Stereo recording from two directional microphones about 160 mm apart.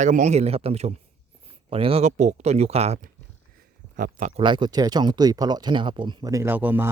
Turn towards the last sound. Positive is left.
turn(degrees=-10)  # may be behind; listen again after turning